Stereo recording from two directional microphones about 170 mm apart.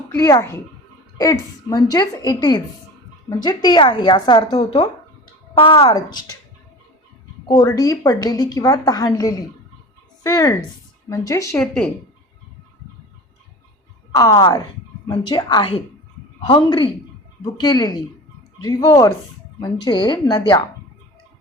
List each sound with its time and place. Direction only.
0.2 s a woman's voice: 15° left (ahead or behind)
5.5 s a woman's voice: 30° left (ahead or behind)
7.4 s a woman's voice: 20° left (ahead or behind)
11.5 s speech: 5° left (ahead or behind)
14.2 s a woman's voice: 20° left (ahead or behind)